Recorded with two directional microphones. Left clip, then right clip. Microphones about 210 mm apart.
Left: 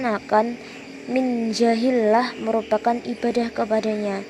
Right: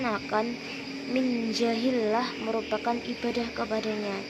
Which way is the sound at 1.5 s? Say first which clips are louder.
Left 7 dB; 35° left (ahead or behind).